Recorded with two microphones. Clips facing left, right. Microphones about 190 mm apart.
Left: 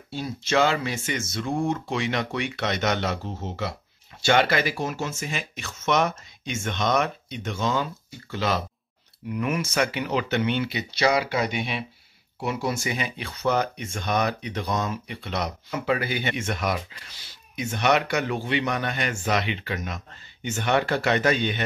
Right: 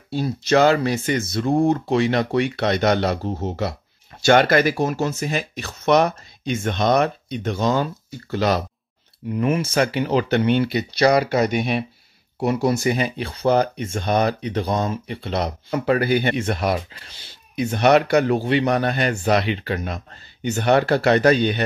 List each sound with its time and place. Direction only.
0.1 s speech: 40° right (ahead or behind)
15.7 s speech: 45° right (ahead or behind)